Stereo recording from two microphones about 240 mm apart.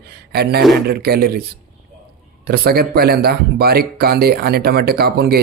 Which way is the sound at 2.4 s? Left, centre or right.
Right.